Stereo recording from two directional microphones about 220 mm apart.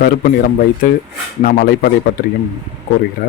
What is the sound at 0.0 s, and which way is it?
Speech, 45° left (ahead or behind).